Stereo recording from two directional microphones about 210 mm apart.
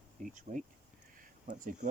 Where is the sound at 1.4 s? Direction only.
40° right (ahead or behind).